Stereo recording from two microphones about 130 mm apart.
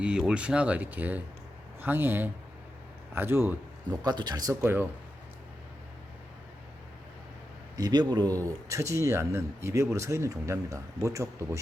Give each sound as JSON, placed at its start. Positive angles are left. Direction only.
{"t": 0.0, "sound": "speech", "side_deg": -5}
{"t": 3.9, "sound": "speech", "side_deg": -30}
{"t": 7.8, "sound": "speech", "side_deg": -30}
{"t": 8.4, "sound": "speech", "side_deg": -25}